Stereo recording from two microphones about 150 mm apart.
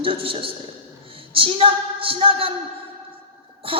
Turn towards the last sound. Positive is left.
turn(degrees=-40)  # may be behind; listen again after turning